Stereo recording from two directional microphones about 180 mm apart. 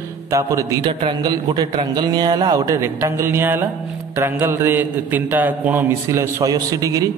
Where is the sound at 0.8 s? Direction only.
30° right (ahead or behind).